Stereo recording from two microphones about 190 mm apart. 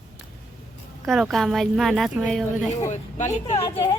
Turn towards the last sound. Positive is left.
turn(degrees=25)  # may be behind; listen again after turning